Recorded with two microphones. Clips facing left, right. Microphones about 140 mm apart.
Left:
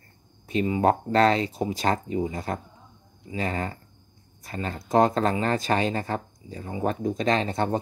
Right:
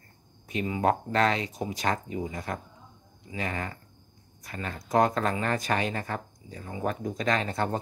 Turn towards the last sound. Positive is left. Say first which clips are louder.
# left 4 dB
turn(degrees=25)  # may be behind; listen again after turning